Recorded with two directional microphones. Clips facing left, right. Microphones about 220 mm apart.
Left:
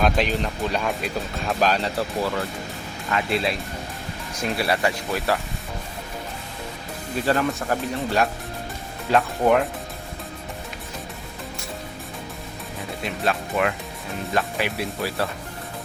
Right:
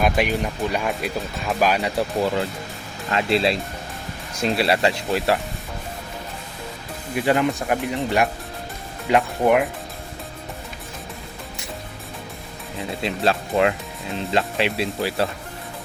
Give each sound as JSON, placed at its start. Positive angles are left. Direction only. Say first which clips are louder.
{"t": 0.0, "sound": "speech", "louder": "right 1 dB", "side_deg": -10}
{"t": 3.1, "sound": "speech", "louder": "right 4 dB", "side_deg": -30}
{"t": 7.2, "sound": "speech", "louder": "right 2 dB", "side_deg": -15}
{"t": 13.0, "sound": "speech", "louder": "right 3 dB", "side_deg": -30}